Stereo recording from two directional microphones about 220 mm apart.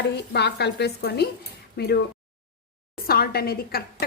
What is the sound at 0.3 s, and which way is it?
Speech, 50° left (ahead or behind).